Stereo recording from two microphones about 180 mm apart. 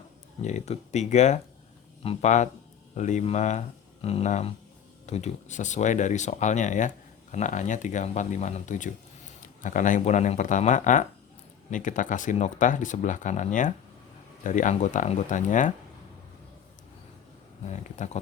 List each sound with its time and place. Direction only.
0.4 s speech: 40° left (ahead or behind)
17.7 s speech: 40° left (ahead or behind)